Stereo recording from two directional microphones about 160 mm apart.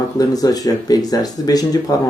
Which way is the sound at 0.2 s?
25° left (ahead or behind).